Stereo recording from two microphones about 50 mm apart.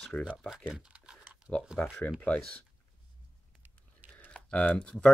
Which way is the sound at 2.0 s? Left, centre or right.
Left.